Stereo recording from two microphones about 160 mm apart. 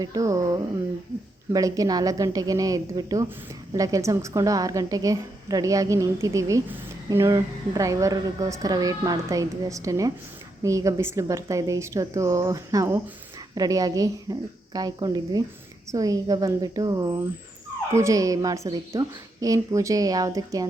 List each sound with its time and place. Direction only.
0.0 s a woman's voice: 20° right (ahead or behind)